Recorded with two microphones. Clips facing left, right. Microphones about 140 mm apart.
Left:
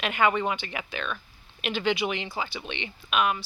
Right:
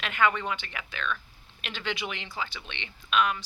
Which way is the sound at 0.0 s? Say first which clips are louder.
Left 3 dB; 15° left (ahead or behind).